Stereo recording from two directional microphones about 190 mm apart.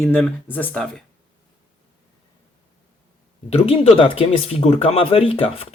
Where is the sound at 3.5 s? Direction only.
30° left (ahead or behind).